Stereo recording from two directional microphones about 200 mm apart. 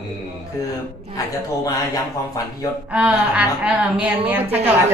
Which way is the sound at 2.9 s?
5° right (ahead or behind).